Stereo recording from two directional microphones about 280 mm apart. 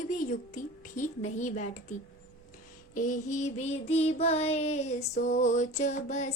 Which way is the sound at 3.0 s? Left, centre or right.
Left.